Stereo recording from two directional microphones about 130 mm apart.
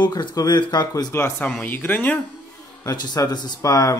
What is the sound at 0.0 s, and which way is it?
A man's voice, 35° left (ahead or behind).